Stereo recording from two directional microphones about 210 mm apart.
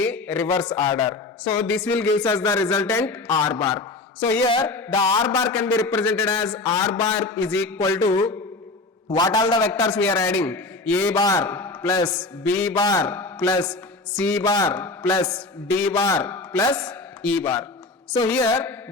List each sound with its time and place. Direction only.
0.0 s a man's voice: 5° left (ahead or behind)
12.4 s speech: 5° left (ahead or behind)
12.7 s a man's voice: 20° left (ahead or behind)
13.1 s speech: 10° left (ahead or behind)
13.7 s mantra: 5° left (ahead or behind)
14.4 s a man's voice: 20° left (ahead or behind)
14.7 s a man's voice: 10° left (ahead or behind)